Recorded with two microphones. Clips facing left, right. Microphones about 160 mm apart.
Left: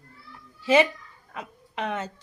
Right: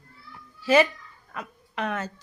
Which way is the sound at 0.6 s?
25° left (ahead or behind).